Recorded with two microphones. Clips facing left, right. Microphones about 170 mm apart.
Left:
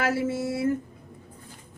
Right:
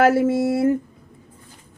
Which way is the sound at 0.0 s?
60° right (ahead or behind).